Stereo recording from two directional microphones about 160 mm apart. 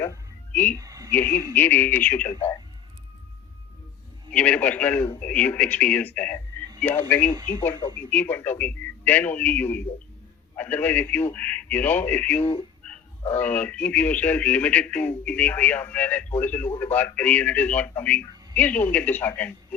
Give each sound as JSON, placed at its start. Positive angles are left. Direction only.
{"t": 0.0, "sound": "music", "side_deg": 15}
{"t": 0.8, "sound": "a sound", "side_deg": -20}
{"t": 1.1, "sound": "speech", "side_deg": 10}
{"t": 4.3, "sound": "speech", "side_deg": 10}
{"t": 7.3, "sound": "speech", "side_deg": -25}
{"t": 8.1, "sound": "speech", "side_deg": 10}